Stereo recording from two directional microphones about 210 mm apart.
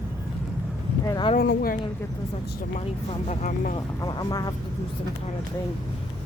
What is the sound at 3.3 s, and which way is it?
Speech, 35° left (ahead or behind).